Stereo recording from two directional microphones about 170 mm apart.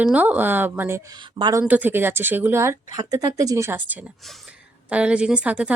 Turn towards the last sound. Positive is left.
turn(degrees=-5)  # may be behind; listen again after turning